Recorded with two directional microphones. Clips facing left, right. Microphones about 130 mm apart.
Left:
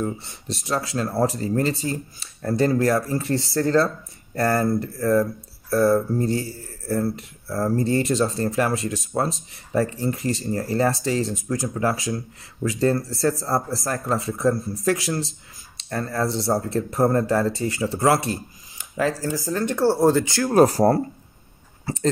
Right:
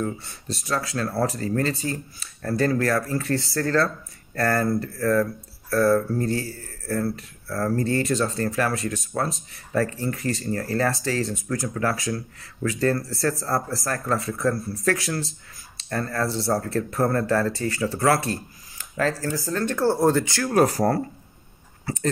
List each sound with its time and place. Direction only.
0.0 s speech: 20° left (ahead or behind)
18.3 s a sound: 15° left (ahead or behind)
19.2 s speech: 20° left (ahead or behind)
19.9 s speech: 5° left (ahead or behind)
20.2 s speech: 25° left (ahead or behind)